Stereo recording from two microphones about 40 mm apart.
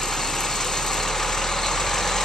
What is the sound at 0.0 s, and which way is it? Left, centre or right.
Vehicle, centre.